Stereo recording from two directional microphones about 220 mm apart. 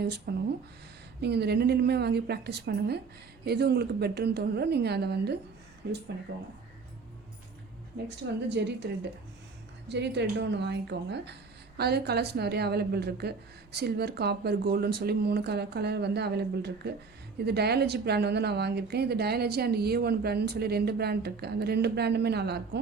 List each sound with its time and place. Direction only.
0.3 s a woman's voice: 45° right (ahead or behind)
8.4 s a woman's voice: 50° right (ahead or behind)
9.9 s a woman's voice: 50° right (ahead or behind)